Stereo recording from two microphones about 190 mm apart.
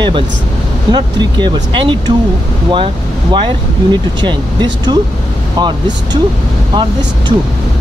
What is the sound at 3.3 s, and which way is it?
Speech, 25° right (ahead or behind).